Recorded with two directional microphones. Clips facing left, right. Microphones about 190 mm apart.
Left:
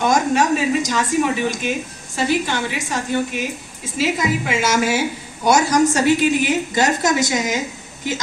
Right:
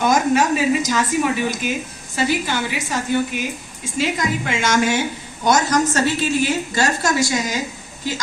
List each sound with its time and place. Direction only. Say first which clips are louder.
0.0 s a woman's voice: even; 5° right (ahead or behind); by 7.6 s 20° left (ahead or behind)